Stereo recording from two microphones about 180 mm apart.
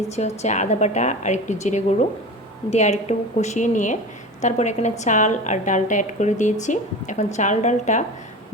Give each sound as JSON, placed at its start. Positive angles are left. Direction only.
{"t": 0.2, "sound": "a woman's voice", "side_deg": 40}